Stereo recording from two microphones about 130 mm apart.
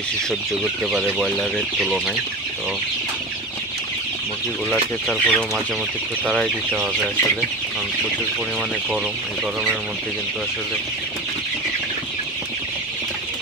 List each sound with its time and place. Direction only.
0.9 s speech: 5° right (ahead or behind)
4.6 s speech: 5° left (ahead or behind)